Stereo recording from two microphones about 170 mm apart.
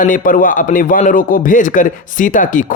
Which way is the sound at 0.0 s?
50° left (ahead or behind).